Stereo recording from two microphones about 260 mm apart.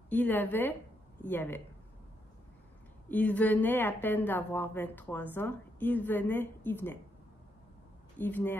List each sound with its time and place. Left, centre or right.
0.1 s a woman's voice: centre
3.1 s a woman's voice: centre
8.2 s a woman's voice: centre